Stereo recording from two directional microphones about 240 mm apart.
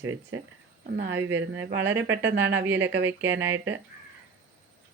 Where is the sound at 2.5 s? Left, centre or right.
Centre.